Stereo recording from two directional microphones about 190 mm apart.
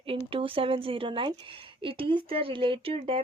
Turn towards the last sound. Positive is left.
turn(degrees=-30)  # may be behind; listen again after turning